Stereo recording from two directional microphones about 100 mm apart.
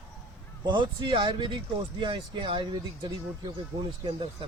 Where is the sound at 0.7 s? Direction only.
50° right (ahead or behind).